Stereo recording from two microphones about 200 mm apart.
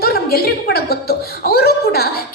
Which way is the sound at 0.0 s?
50° left (ahead or behind).